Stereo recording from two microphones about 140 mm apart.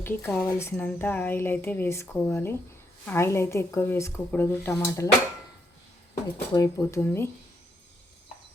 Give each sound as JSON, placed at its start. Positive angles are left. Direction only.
{"t": 0.0, "sound": "a woman's voice", "side_deg": 15}
{"t": 6.5, "sound": "speech", "side_deg": 25}